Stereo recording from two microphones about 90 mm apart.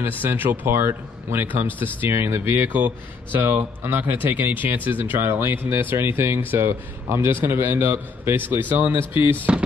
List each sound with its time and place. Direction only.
0.0 s speech: 25° right (ahead or behind)
9.5 s speech: 15° right (ahead or behind)